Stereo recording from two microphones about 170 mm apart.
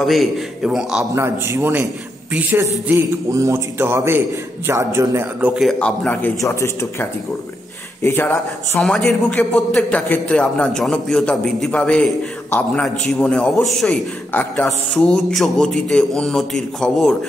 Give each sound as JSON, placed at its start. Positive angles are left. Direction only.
{"t": 0.0, "sound": "a man's voice", "side_deg": 0}
{"t": 1.1, "sound": "speech", "side_deg": -15}
{"t": 5.6, "sound": "a man's voice", "side_deg": 5}